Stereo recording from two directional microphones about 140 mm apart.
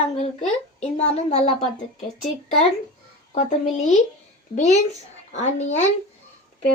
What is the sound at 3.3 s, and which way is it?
A woman's voice, 55° left (ahead or behind).